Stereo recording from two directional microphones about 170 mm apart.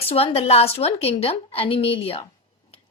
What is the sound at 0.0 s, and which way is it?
Speech, 35° left (ahead or behind).